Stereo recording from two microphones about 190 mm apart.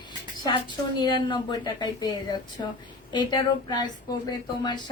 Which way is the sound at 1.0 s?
25° left (ahead or behind).